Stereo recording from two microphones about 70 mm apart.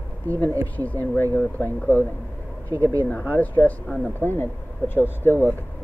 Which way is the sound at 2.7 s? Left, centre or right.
Right.